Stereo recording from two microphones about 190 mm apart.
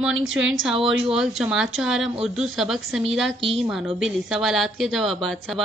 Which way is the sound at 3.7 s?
Centre (ahead or behind).